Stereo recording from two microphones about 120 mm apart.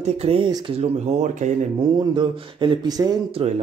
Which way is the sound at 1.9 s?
40° right (ahead or behind).